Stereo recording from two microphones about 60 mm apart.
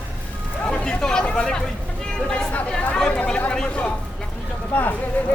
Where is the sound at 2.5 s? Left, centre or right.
Left.